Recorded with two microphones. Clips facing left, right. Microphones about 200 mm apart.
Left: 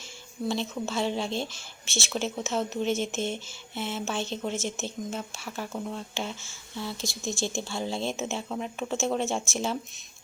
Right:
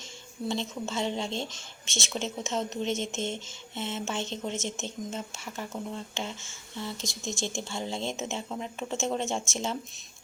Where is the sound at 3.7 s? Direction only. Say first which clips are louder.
Left 2 dB; 25° right (ahead or behind).